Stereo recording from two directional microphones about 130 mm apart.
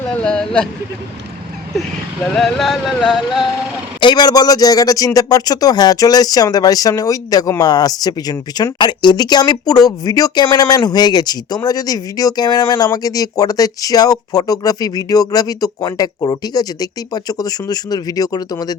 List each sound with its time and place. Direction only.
0.1 s a sound: 5° left (ahead or behind)
2.3 s music: centre (ahead or behind)
4.0 s speech: 35° left (ahead or behind)